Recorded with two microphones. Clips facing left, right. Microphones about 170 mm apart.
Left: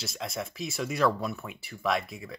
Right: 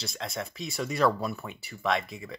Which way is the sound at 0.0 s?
Centre (ahead or behind).